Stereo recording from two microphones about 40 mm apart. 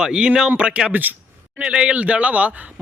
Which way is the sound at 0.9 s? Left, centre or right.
Right.